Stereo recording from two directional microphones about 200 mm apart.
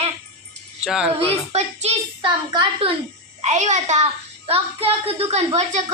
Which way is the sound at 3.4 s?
35° right (ahead or behind).